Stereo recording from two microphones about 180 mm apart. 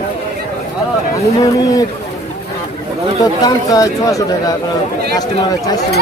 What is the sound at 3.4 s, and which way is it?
Speech, 20° left (ahead or behind).